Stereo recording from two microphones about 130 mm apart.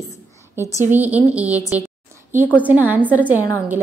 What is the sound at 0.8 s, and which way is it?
Speech, 15° right (ahead or behind).